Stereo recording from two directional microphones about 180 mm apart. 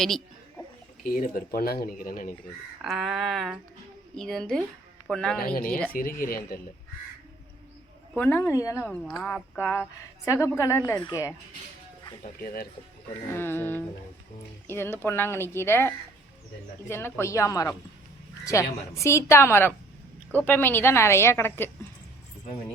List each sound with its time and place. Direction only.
0.0 s a sound: 5° left (ahead or behind)
1.0 s speech: 50° left (ahead or behind)
2.8 s a sound: centre (ahead or behind)
5.5 s speech: 50° left (ahead or behind)
8.1 s a woman's voice: 10° left (ahead or behind)
12.4 s speech: 55° left (ahead or behind)
13.3 s a woman's voice: 10° left (ahead or behind)